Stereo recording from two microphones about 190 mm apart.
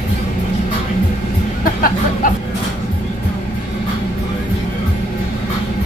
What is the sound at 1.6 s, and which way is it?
Speech, 45° left (ahead or behind).